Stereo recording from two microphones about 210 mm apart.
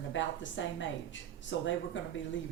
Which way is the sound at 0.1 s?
60° left (ahead or behind).